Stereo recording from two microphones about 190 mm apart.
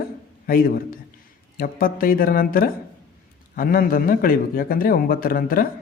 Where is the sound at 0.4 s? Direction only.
50° left (ahead or behind).